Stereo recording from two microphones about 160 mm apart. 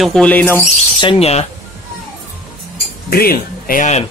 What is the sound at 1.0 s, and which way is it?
Speech, 35° left (ahead or behind).